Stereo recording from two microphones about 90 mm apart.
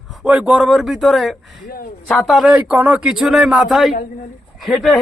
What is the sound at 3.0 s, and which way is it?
Speech, 5° right (ahead or behind).